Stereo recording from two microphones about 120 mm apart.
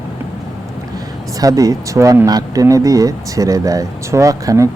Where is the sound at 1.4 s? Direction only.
30° right (ahead or behind).